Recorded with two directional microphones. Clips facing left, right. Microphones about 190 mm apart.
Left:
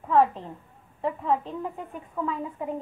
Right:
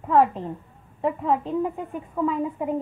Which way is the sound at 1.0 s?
15° right (ahead or behind).